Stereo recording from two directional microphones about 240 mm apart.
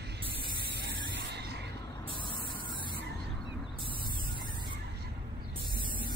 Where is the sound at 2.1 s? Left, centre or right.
Left.